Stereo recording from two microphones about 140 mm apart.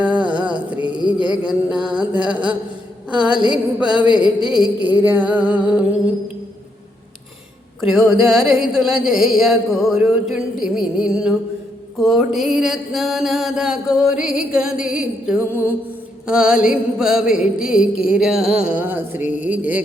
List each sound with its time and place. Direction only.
0.0 s music: 10° right (ahead or behind)
3.1 s a sound: 5° right (ahead or behind)
3.8 s music: 5° right (ahead or behind)
7.8 s music: 5° right (ahead or behind)